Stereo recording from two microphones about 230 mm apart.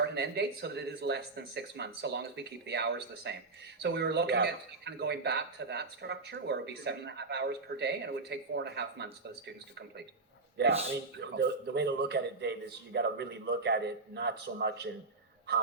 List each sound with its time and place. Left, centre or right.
0.0 s speech: right
10.6 s speech: right